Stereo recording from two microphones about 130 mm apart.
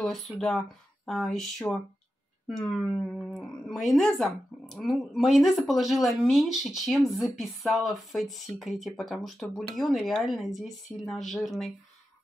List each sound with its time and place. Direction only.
0.0 s speech: centre (ahead or behind)